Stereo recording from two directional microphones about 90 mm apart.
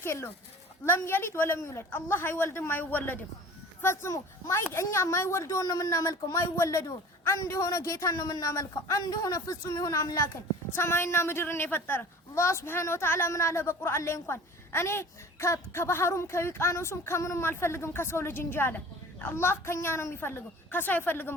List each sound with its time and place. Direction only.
0.0 s a child's voice: 30° left (ahead or behind)
10.8 s a woman's voice: 30° left (ahead or behind)